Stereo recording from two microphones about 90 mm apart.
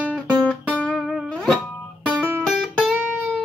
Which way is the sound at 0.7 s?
15° left (ahead or behind).